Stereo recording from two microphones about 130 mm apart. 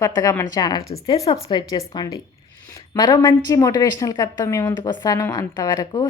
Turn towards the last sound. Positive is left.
turn(degrees=35)  # may be behind; listen again after turning